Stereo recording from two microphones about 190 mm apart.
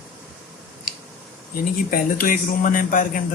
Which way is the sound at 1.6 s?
45° left (ahead or behind).